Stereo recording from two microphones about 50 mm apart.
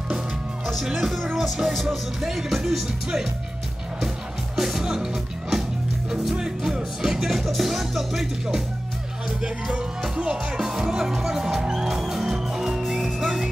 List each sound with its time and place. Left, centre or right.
0.8 s music: centre
4.6 s music: centre
9.4 s music: centre